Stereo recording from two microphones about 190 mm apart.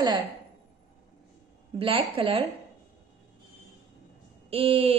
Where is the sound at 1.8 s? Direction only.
30° right (ahead or behind).